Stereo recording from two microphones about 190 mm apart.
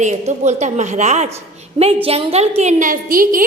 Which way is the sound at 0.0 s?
40° right (ahead or behind).